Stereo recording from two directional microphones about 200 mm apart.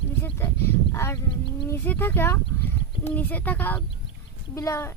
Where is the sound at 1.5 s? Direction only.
15° left (ahead or behind).